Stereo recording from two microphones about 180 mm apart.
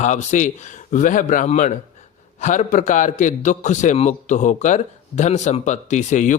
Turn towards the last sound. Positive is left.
turn(degrees=40)  # may be behind; listen again after turning